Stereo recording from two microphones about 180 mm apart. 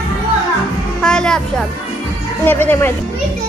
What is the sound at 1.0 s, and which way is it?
A child's voice, 5° left (ahead or behind).